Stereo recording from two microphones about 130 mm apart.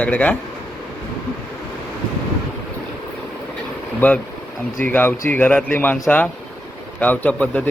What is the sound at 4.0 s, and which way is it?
Speech, 10° left (ahead or behind).